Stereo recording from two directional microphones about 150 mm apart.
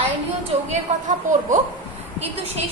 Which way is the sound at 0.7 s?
55° right (ahead or behind).